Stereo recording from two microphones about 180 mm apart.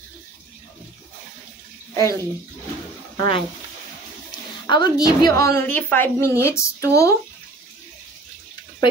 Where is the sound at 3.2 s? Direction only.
30° left (ahead or behind).